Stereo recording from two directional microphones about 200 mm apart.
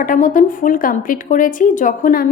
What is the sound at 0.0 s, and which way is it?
Speech, 40° left (ahead or behind).